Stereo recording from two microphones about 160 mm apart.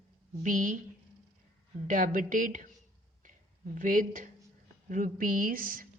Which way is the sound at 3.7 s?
55° right (ahead or behind).